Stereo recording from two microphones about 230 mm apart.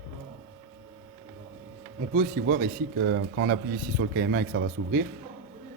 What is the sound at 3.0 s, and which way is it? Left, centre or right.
Speech, right.